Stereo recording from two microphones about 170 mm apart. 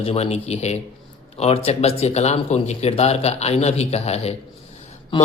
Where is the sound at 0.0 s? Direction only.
40° left (ahead or behind).